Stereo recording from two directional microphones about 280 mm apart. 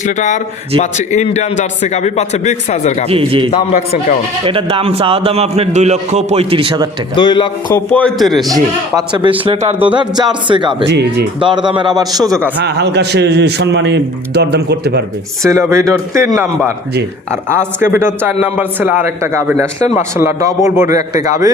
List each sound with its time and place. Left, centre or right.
0.0 s a man's voice: left
3.1 s a man's voice: centre
3.5 s a man's voice: left
4.4 s a man's voice: centre
7.2 s a man's voice: centre
8.4 s speech: centre
10.8 s a man's voice: right
11.3 s speech: centre
12.6 s a man's voice: right
15.4 s speech: centre
17.9 s speech: centre